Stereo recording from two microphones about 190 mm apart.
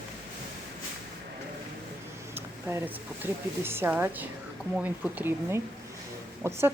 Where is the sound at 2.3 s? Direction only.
10° right (ahead or behind).